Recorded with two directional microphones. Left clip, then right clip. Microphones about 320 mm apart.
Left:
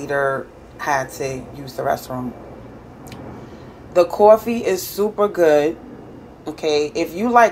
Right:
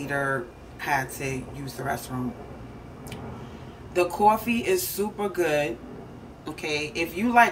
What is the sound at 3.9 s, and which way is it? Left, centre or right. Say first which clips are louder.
Speech: left 9 dB; centre.